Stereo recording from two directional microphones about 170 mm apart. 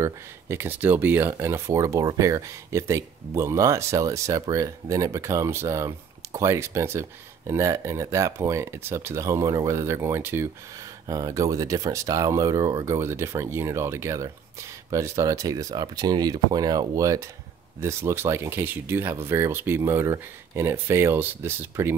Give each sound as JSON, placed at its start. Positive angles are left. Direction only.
{"t": 0.0, "sound": "speech", "side_deg": -15}